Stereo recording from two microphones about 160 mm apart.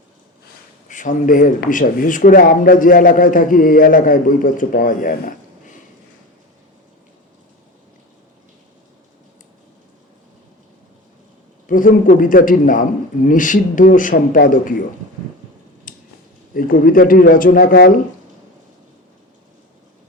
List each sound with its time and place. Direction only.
0.9 s speech: 55° left (ahead or behind)
11.6 s speech: 55° left (ahead or behind)
16.6 s speech: 60° left (ahead or behind)